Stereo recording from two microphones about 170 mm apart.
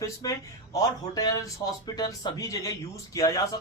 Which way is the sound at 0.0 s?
20° left (ahead or behind).